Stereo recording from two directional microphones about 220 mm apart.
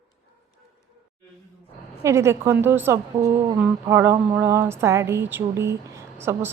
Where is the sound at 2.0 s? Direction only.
10° right (ahead or behind).